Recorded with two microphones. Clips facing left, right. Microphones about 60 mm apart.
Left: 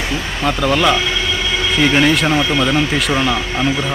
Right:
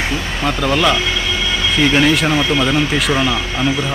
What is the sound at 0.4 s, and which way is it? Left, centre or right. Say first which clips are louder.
Speech: left 1 dB; centre.